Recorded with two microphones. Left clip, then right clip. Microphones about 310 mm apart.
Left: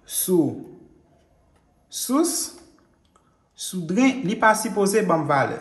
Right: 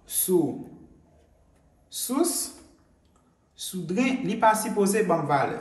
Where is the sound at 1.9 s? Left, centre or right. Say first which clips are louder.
Left 4 dB; left.